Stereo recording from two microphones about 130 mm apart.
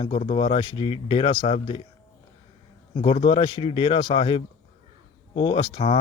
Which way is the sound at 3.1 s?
45° left (ahead or behind).